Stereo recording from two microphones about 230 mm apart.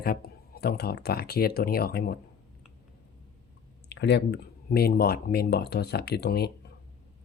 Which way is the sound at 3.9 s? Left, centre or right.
Left.